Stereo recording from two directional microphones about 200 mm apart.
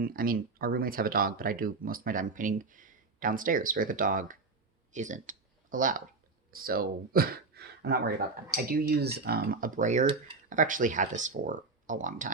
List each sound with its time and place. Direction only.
0.0 s speech: 45° right (ahead or behind)
4.9 s a sound: 40° right (ahead or behind)
6.5 s speech: 45° right (ahead or behind)